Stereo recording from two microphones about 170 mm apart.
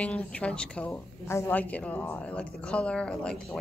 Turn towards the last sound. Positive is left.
turn(degrees=5)  # may be behind; listen again after turning